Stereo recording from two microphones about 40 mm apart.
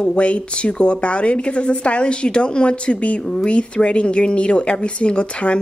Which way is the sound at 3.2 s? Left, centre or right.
Centre.